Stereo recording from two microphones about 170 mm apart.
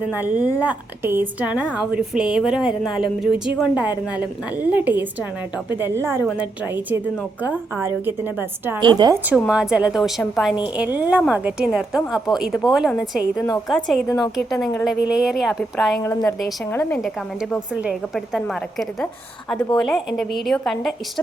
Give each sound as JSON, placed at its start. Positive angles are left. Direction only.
{"t": 0.1, "sound": "a woman's voice", "side_deg": -10}
{"t": 8.8, "sound": "a woman's voice", "side_deg": -25}
{"t": 9.2, "sound": "a woman's voice", "side_deg": -5}
{"t": 14.8, "sound": "a woman's voice", "side_deg": -5}